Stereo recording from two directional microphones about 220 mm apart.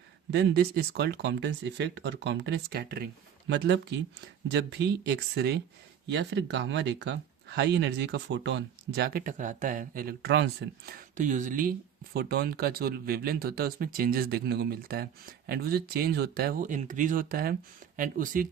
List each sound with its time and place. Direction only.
0.3 s speech: 50° right (ahead or behind)